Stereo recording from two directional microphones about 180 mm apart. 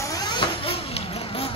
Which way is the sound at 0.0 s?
20° left (ahead or behind).